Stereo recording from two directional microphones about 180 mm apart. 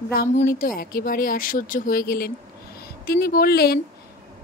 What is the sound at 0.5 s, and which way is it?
A woman's voice, 50° left (ahead or behind).